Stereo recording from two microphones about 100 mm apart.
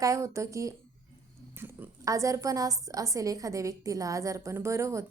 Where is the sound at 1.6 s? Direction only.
20° right (ahead or behind).